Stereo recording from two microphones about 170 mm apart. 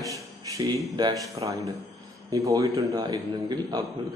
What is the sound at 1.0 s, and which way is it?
A man's voice, 20° right (ahead or behind).